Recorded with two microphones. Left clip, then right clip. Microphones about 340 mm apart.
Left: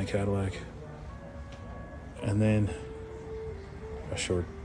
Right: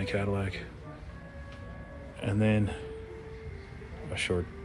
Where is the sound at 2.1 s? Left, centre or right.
Centre.